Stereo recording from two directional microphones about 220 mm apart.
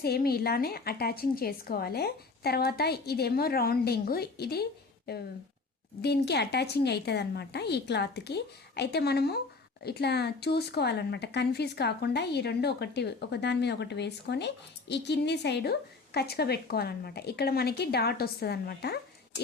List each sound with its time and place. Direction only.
0.0 s speech: 45° left (ahead or behind)
6.0 s speech: 50° left (ahead or behind)